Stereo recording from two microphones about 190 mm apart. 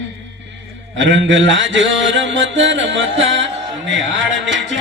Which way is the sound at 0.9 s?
80° right.